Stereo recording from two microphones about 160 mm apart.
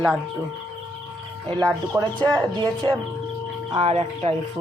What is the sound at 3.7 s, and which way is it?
Speech, 40° right (ahead or behind).